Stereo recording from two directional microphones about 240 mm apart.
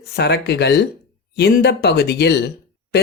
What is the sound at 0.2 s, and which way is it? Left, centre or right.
Speech, left.